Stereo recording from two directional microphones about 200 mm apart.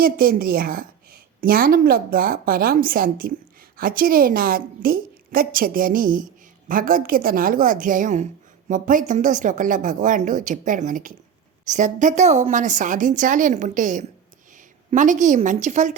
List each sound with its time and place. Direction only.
0.0 s a woman's voice: 45° right (ahead or behind)